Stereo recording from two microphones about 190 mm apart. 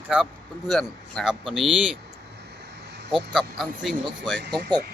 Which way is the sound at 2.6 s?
65° right (ahead or behind).